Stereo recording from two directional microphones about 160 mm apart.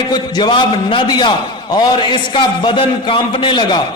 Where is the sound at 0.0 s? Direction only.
25° left (ahead or behind).